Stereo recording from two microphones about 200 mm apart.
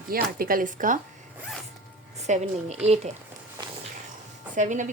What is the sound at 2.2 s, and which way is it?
Speech, 35° right (ahead or behind).